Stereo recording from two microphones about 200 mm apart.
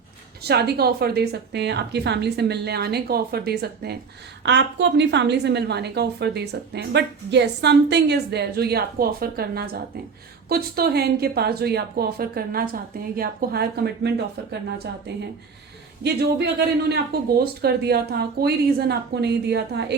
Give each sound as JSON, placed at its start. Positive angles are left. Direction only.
{"t": 0.4, "sound": "a woman's voice", "side_deg": -55}
{"t": 16.0, "sound": "speech", "side_deg": -55}